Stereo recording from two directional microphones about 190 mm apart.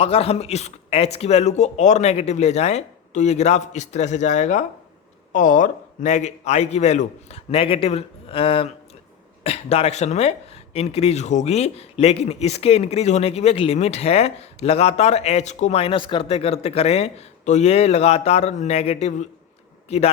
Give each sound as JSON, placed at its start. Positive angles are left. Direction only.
{"t": 0.0, "sound": "speech", "side_deg": 30}